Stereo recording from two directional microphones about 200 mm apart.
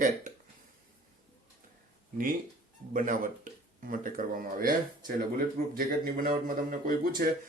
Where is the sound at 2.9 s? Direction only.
40° right (ahead or behind).